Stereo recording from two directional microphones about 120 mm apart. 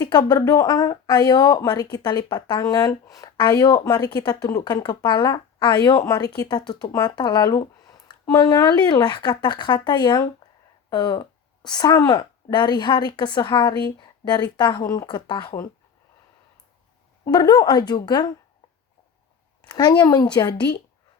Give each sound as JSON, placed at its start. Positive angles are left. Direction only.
{"t": 0.0, "sound": "speech", "side_deg": 35}
{"t": 17.2, "sound": "speech", "side_deg": 30}
{"t": 19.7, "sound": "speech", "side_deg": 30}